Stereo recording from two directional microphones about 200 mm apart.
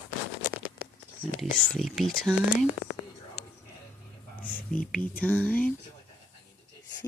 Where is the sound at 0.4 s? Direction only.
50° right (ahead or behind).